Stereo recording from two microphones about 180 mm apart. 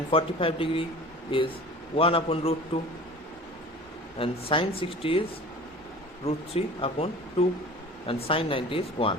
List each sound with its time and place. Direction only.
0.1 s speech: 30° left (ahead or behind)
4.2 s speech: 30° left (ahead or behind)
6.2 s speech: 30° left (ahead or behind)